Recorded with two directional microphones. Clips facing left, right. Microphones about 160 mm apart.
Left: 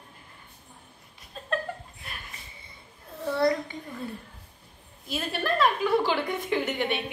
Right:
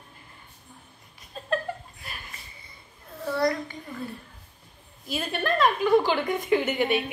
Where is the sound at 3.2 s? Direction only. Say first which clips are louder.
Left 1 dB; 20° left (ahead or behind).